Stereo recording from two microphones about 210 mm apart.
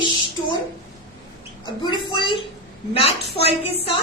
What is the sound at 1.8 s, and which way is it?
Speech, 20° left (ahead or behind).